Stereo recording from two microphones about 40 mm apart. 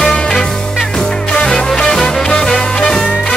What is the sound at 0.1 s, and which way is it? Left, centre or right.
Music, centre.